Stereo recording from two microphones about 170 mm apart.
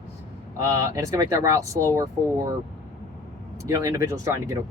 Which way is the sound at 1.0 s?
20° right (ahead or behind).